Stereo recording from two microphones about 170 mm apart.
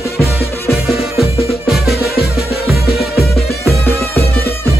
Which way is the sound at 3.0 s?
Centre (ahead or behind).